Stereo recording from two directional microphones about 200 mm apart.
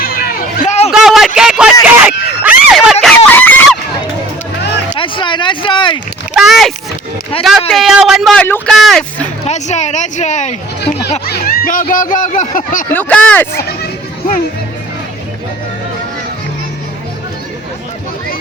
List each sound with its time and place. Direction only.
0.0 s hubbub: 45° left (ahead or behind)
0.9 s a sound: centre (ahead or behind)
1.4 s speech: 5° right (ahead or behind)
3.2 s a sound: 10° left (ahead or behind)
4.9 s speech: 25° left (ahead or behind)
6.3 s speech: centre (ahead or behind)
7.3 s speech: 30° left (ahead or behind)
7.7 s speech: centre (ahead or behind)
9.5 s speech: 35° left (ahead or behind)
11.3 s speech: 50° left (ahead or behind)
12.9 s speech: 10° left (ahead or behind)